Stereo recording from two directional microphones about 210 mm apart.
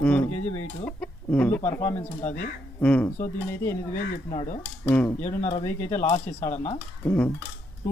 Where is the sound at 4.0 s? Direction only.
40° left (ahead or behind).